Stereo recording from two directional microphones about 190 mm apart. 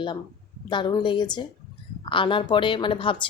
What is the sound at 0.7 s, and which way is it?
Speech, 25° left (ahead or behind).